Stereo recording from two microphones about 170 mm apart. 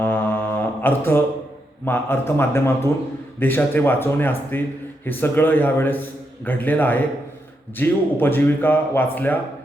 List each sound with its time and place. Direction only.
0.0 s mantra: 10° left (ahead or behind)
1.8 s speech: 15° left (ahead or behind)